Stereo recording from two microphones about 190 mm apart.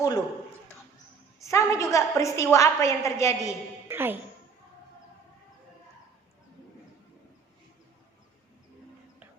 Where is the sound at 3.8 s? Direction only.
10° right (ahead or behind).